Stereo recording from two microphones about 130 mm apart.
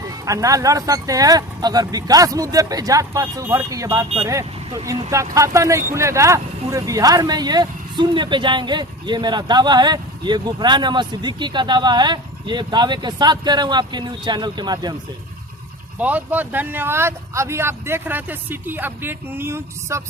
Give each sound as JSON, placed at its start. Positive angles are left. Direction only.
{"t": 0.3, "sound": "speech", "side_deg": -25}
{"t": 16.0, "sound": "speech", "side_deg": -10}